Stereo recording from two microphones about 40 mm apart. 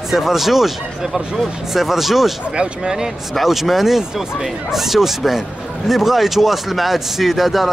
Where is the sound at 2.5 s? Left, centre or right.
Centre.